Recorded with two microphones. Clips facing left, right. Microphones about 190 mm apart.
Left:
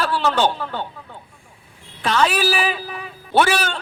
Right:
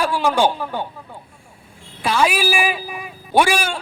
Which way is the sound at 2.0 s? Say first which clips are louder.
Even; 10° right (ahead or behind).